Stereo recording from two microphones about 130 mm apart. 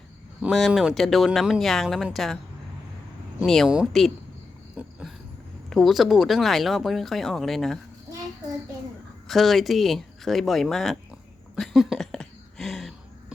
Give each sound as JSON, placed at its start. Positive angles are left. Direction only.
{"t": 0.5, "sound": "speech", "side_deg": 0}
{"t": 3.4, "sound": "speech", "side_deg": 0}
{"t": 4.8, "sound": "a sound", "side_deg": -10}
{"t": 5.7, "sound": "speech", "side_deg": 0}
{"t": 9.2, "sound": "speech", "side_deg": 0}
{"t": 11.5, "sound": "a sound", "side_deg": 0}